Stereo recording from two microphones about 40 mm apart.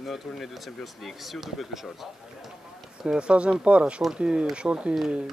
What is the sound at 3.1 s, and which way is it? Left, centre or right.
Speech, right.